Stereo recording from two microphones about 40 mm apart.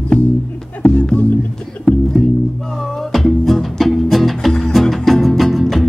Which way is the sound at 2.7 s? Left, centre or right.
Centre.